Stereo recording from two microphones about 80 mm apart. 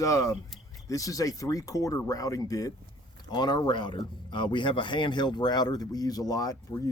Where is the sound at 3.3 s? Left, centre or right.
Left.